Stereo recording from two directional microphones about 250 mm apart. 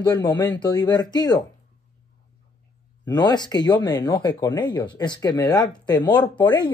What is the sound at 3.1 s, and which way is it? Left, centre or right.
Speech, centre.